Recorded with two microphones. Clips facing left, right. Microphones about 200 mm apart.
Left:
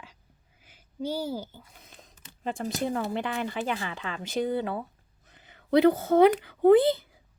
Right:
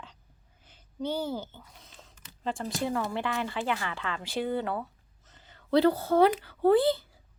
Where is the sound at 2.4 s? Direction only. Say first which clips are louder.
Left 1 dB; 15° left (ahead or behind).